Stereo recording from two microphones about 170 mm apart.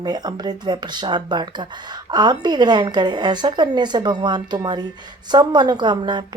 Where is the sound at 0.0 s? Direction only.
25° right (ahead or behind).